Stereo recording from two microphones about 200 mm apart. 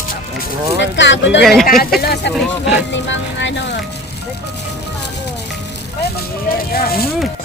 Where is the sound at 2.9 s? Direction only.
65° left (ahead or behind).